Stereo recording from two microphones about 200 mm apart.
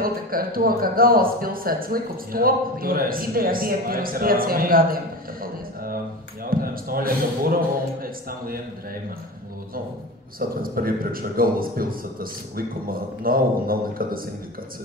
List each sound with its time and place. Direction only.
0.0 s speech: 45° right (ahead or behind)
10.6 s speech: 45° right (ahead or behind)